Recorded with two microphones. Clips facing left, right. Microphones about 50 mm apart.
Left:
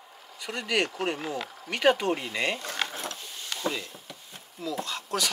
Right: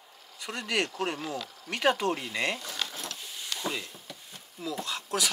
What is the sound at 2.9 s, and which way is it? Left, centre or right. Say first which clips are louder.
Printer: left 3 dB; left.